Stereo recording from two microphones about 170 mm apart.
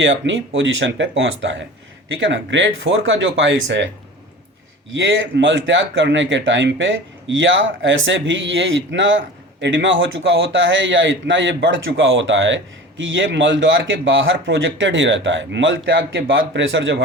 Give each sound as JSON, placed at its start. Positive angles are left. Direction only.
{"t": 0.0, "sound": "speech", "side_deg": -90}
{"t": 4.9, "sound": "speech", "side_deg": -90}